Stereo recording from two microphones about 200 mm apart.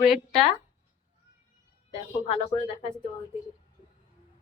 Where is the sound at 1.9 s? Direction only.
30° left (ahead or behind).